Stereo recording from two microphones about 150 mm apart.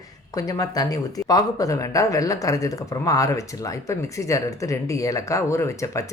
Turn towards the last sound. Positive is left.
turn(degrees=20)  # may be behind; listen again after turning